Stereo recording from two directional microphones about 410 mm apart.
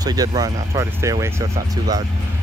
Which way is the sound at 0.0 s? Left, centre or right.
Centre.